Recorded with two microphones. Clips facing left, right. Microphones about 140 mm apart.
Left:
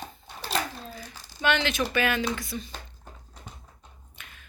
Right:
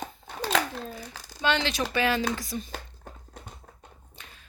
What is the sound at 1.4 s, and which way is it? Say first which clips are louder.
Speech: left 1 dB; 30° right (ahead or behind).